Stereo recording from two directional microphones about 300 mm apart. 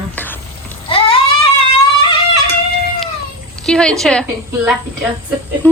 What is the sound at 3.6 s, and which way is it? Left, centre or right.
Speech, centre.